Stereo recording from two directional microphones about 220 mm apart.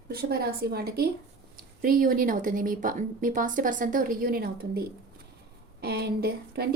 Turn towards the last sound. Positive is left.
turn(degrees=-45)  # may be behind; listen again after turning